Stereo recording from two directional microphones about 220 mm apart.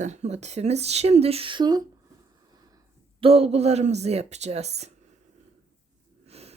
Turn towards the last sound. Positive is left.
turn(degrees=-30)  # may be behind; listen again after turning